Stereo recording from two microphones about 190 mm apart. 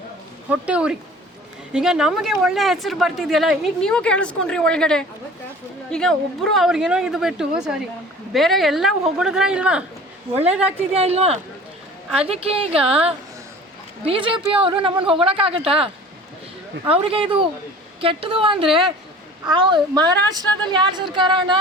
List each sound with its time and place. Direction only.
0.4 s speech: 5° right (ahead or behind)
10.8 s a woman's voice: 30° right (ahead or behind)
16.9 s a woman's voice: 30° right (ahead or behind)